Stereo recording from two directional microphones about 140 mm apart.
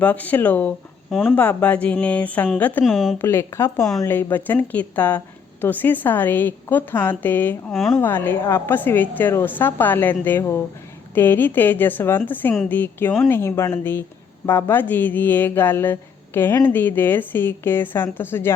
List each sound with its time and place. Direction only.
0.0 s speech: 10° left (ahead or behind)
1.1 s speech: centre (ahead or behind)
1.4 s speech: 10° left (ahead or behind)
2.8 s speech: centre (ahead or behind)
3.2 s speech: 15° left (ahead or behind)
7.7 s speech: centre (ahead or behind)
7.9 s speech: 15° left (ahead or behind)